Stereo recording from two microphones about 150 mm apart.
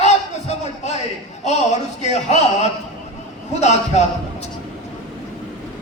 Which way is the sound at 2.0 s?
50° left (ahead or behind).